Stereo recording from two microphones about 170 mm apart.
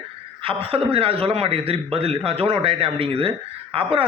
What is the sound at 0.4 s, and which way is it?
A man's voice, 35° right (ahead or behind).